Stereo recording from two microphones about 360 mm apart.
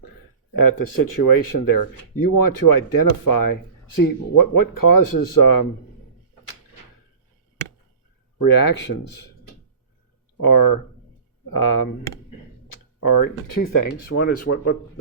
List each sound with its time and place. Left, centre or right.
0.5 s speech: left
8.4 s speech: left
10.3 s speech: left
14.2 s speech: left